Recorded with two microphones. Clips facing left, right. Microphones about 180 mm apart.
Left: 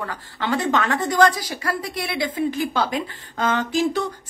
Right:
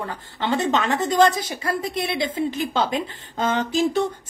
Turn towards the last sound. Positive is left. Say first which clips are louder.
# right 1 dB
turn(degrees=-25)  # may be behind; listen again after turning